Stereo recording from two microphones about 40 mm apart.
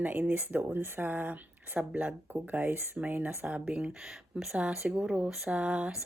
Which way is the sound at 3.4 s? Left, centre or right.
Right.